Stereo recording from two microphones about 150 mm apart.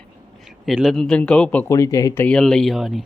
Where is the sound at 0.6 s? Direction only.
Centre (ahead or behind).